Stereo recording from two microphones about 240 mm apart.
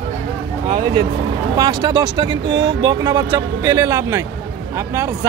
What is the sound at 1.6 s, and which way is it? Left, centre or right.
Speech, centre.